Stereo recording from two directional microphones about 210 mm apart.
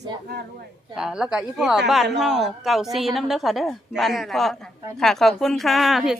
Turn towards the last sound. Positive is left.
turn(degrees=0)  # may be behind; listen again after turning